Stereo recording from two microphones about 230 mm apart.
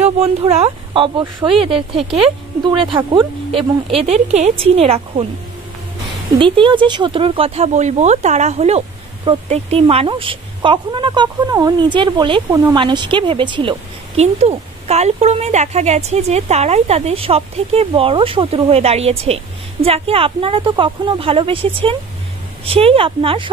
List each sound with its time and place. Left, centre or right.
0.0 s a woman's voice: right
6.3 s a woman's voice: right